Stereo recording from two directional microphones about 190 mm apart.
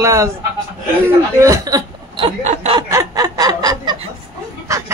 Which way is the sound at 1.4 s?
15° right (ahead or behind).